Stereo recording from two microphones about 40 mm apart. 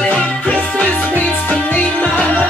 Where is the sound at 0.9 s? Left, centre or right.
Left.